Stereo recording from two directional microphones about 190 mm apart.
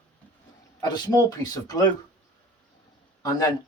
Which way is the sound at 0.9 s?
20° left (ahead or behind).